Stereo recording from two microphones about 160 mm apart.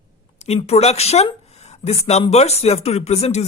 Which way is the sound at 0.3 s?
40° left (ahead or behind).